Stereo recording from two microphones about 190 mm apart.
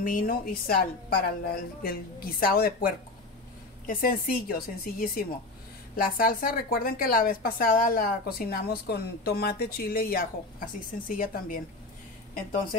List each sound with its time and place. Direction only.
0.0 s a woman's voice: 45° left (ahead or behind)